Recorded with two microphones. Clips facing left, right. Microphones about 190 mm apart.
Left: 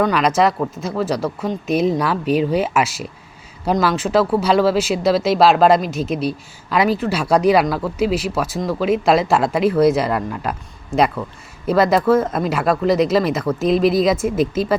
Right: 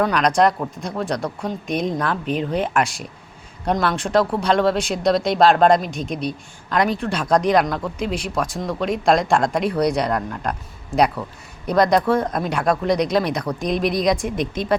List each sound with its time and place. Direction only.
0.0 s speech: 5° left (ahead or behind)